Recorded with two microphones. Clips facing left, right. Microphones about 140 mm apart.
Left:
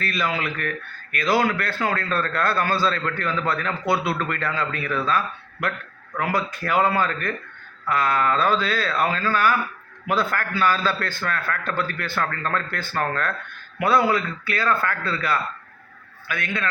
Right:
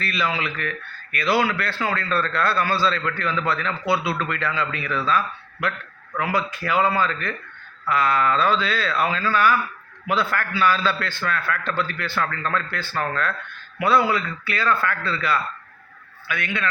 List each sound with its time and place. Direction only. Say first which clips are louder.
0.0 s a man's voice: even; 45° left (ahead or behind)